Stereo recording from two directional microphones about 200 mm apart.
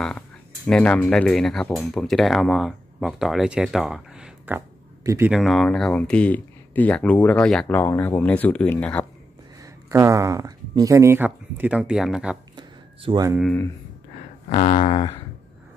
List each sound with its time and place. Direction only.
0.7 s speech: 5° left (ahead or behind); by 5.3 s 15° right (ahead or behind)
5.3 s speech: centre (ahead or behind)
9.6 s speech: 15° right (ahead or behind)
12.5 s a sound: 25° right (ahead or behind)
14.5 s speech: 30° left (ahead or behind)